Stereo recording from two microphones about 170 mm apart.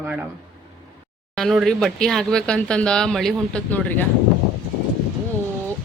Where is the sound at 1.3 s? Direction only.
Centre (ahead or behind).